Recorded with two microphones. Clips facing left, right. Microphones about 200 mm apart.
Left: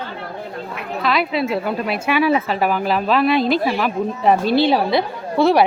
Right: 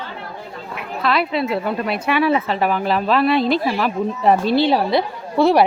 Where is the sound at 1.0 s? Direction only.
Centre (ahead or behind).